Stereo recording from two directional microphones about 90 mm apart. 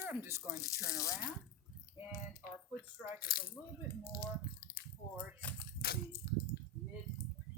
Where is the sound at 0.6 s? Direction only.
35° left (ahead or behind).